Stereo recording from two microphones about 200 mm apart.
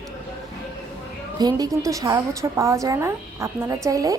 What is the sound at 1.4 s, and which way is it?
A woman's voice, 20° right (ahead or behind).